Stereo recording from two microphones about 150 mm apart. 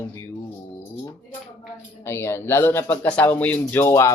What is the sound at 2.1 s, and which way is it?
Speech, 15° left (ahead or behind).